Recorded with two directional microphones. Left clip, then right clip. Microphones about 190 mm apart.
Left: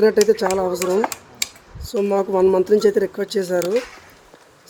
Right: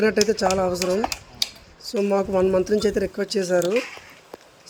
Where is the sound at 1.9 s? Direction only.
25° right (ahead or behind).